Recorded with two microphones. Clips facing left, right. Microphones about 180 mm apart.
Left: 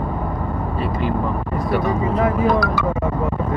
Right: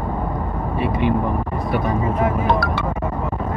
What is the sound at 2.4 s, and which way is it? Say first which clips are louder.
Speech: left 2 dB; 30° right (ahead or behind).